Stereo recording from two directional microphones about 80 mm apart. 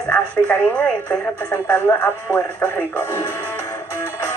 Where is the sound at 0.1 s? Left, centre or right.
Centre.